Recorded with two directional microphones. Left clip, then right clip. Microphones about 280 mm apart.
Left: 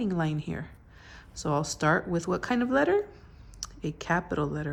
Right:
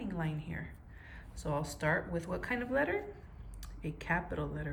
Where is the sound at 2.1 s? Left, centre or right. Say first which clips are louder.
Left 8 dB; centre.